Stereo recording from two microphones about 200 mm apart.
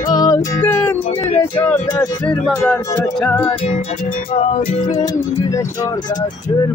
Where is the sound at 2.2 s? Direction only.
5° left (ahead or behind).